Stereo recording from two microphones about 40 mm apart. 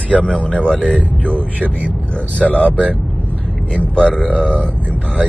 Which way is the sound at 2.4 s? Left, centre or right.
Left.